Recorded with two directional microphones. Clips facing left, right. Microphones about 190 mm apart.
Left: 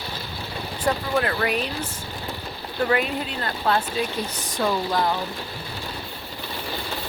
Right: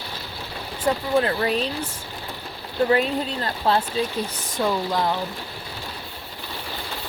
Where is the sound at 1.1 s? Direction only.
25° right (ahead or behind).